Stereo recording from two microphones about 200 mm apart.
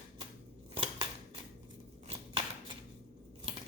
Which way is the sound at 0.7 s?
30° right (ahead or behind).